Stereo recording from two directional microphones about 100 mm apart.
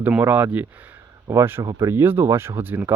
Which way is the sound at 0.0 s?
15° right (ahead or behind).